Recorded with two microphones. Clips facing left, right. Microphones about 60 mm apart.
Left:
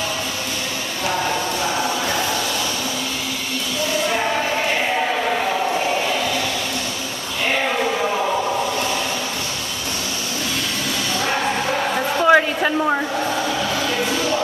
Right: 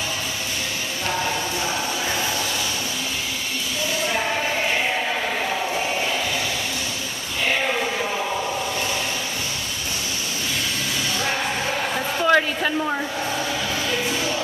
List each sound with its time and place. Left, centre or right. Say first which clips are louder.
12.2 s hair dryer: left 4 dB; centre